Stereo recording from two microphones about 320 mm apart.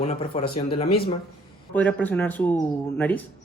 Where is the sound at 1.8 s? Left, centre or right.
Centre.